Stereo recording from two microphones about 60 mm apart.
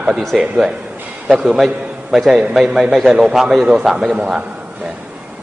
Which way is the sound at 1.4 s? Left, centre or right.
Centre.